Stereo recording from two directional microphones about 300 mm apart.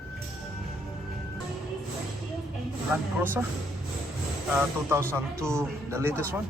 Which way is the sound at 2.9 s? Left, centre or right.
Centre.